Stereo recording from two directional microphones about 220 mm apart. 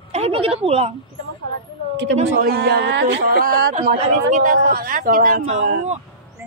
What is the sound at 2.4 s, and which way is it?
Speech, 45° right (ahead or behind).